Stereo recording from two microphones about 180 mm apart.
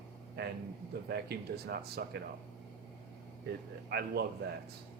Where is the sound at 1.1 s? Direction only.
60° right (ahead or behind).